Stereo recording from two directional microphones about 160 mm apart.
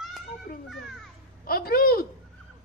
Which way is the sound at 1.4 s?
70° left (ahead or behind).